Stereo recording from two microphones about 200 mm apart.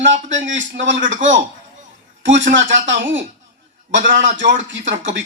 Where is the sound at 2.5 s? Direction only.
70° right (ahead or behind).